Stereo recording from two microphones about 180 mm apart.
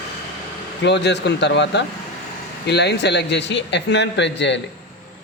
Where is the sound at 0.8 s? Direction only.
70° left (ahead or behind).